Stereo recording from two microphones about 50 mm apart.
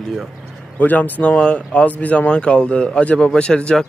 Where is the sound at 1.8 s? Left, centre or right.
Left.